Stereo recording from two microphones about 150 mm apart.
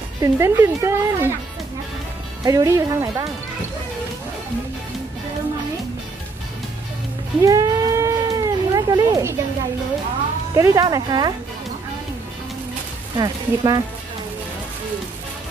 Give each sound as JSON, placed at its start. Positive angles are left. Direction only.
{"t": 0.2, "sound": "speech", "side_deg": -20}
{"t": 2.4, "sound": "speech", "side_deg": -20}
{"t": 7.3, "sound": "cat", "side_deg": -20}
{"t": 10.5, "sound": "speech", "side_deg": -20}
{"t": 13.2, "sound": "speech", "side_deg": -25}